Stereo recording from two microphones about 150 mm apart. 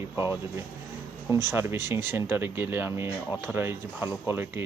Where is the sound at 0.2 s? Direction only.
15° right (ahead or behind).